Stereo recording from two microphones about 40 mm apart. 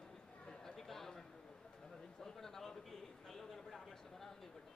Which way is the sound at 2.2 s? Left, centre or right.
Centre.